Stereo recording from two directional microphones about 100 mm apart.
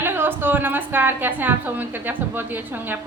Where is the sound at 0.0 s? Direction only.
20° right (ahead or behind).